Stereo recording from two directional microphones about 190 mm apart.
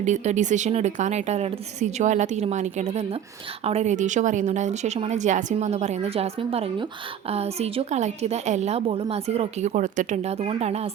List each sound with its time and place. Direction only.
0.0 s a woman's voice: 40° right (ahead or behind)